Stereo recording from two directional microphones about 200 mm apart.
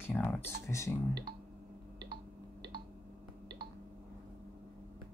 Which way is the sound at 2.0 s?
55° right (ahead or behind).